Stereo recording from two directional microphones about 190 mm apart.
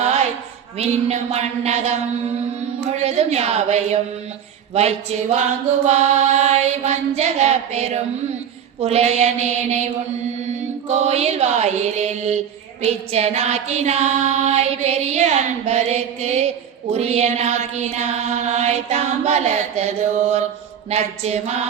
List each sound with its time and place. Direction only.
0.0 s a sound: 35° right (ahead or behind)
0.8 s female singing: 35° right (ahead or behind)
3.0 s female singing: 35° right (ahead or behind)
10.8 s female singing: 35° right (ahead or behind)
20.9 s female singing: 35° right (ahead or behind)